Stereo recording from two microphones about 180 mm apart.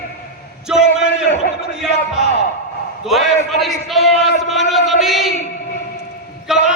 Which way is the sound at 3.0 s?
Centre (ahead or behind).